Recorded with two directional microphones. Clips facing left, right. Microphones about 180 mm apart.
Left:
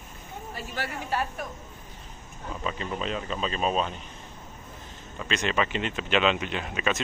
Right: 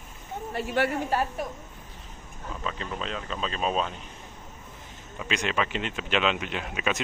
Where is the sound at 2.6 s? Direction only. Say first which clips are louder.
Left 2 dB; 5° left (ahead or behind).